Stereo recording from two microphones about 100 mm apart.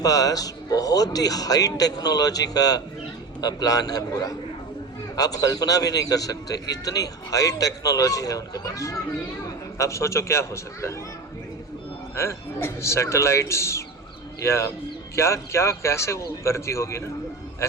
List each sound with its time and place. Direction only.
0.0 s a man's voice: 35° left (ahead or behind)
12.1 s speech: 25° left (ahead or behind)